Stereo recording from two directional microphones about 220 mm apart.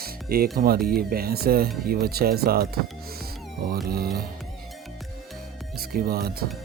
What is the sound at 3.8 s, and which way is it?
Speech, 45° right (ahead or behind).